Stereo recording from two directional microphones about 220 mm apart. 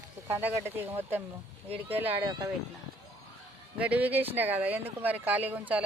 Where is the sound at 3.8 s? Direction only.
5° right (ahead or behind).